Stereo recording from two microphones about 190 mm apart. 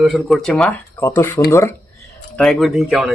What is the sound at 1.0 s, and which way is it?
Speech, 15° left (ahead or behind).